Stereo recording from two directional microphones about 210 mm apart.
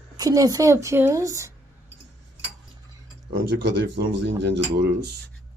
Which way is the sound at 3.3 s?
55° right (ahead or behind).